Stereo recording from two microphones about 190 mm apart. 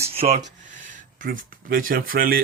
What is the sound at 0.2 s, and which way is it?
Speech, 35° right (ahead or behind).